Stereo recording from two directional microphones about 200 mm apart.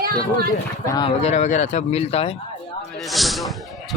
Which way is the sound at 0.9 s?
30° left (ahead or behind).